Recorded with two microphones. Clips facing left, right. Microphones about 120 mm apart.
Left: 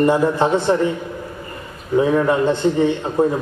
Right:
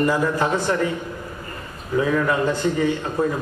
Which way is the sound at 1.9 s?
25° left (ahead or behind).